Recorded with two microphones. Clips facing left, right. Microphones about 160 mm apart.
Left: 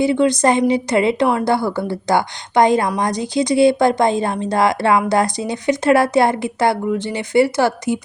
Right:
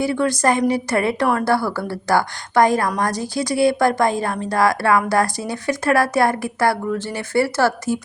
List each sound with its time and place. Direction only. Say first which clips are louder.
0.0 s speech: left 4 dB; 20° left (ahead or behind)